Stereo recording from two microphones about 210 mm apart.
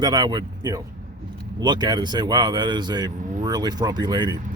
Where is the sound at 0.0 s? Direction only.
20° right (ahead or behind).